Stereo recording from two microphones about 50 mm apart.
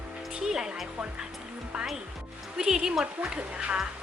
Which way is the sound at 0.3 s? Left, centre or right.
Centre.